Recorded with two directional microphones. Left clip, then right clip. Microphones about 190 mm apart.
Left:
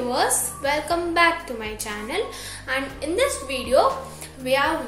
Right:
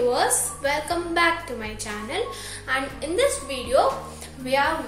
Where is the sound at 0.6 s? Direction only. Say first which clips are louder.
Left 3 dB; 25° left (ahead or behind).